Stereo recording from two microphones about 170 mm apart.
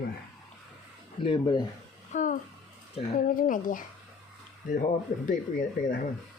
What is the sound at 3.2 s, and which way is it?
Speech, 55° left (ahead or behind).